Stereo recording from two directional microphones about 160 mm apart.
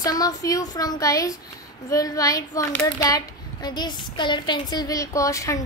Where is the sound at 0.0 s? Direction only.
25° left (ahead or behind).